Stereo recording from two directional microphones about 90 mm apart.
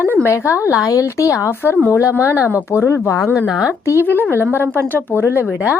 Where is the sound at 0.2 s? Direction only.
30° left (ahead or behind).